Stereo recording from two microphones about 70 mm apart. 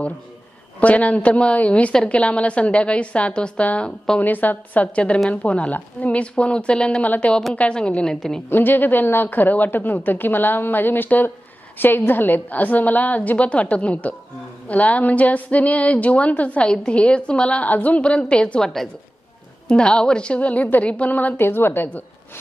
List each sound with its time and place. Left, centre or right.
0.7 s a woman's voice: centre
8.5 s a woman's voice: left